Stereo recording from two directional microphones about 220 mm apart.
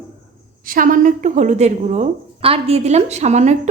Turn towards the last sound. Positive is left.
turn(degrees=-30)  # may be behind; listen again after turning